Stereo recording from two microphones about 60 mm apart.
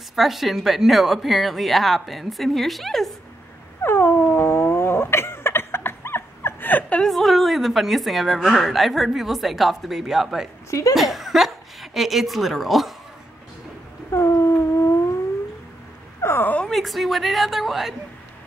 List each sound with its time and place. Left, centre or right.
0.1 s speech: centre
3.8 s dog: left
7.1 s speech: centre
10.7 s speech: left
11.0 s speech: centre
14.1 s a sound: left
16.2 s a sound: left
16.6 s speech: centre